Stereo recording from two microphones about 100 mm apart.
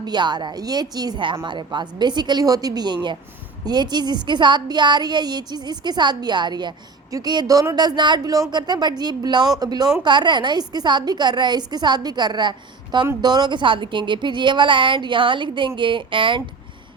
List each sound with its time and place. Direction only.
0.0 s a woman's voice: 45° right (ahead or behind)